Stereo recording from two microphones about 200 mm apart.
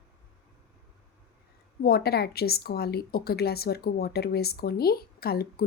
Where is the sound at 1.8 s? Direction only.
50° left (ahead or behind).